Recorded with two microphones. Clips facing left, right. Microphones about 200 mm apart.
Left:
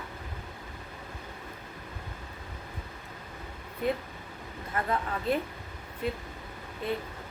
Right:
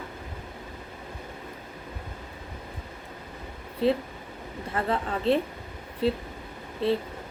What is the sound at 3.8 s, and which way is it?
A woman's voice, 30° right (ahead or behind).